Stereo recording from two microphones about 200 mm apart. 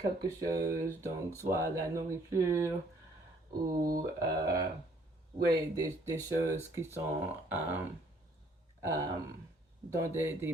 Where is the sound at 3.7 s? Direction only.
45° right (ahead or behind).